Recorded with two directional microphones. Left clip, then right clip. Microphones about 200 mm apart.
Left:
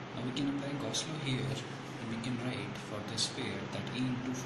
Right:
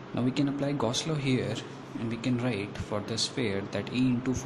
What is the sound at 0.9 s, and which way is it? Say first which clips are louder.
Speech: right 7 dB; 45° right (ahead or behind).